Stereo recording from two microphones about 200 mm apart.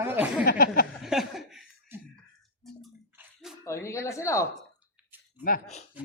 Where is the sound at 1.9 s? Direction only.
10° right (ahead or behind).